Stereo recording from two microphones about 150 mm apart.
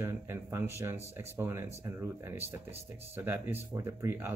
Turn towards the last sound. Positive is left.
turn(degrees=-15)  # may be behind; listen again after turning